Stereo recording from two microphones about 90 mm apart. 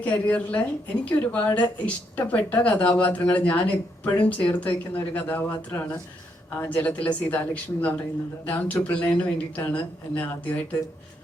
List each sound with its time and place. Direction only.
0.0 s a woman's voice: 20° left (ahead or behind)